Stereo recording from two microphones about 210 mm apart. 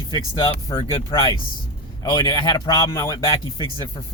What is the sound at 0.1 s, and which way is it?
Speech, 20° left (ahead or behind).